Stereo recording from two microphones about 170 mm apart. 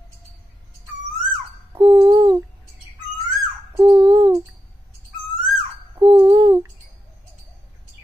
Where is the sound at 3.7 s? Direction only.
25° right (ahead or behind).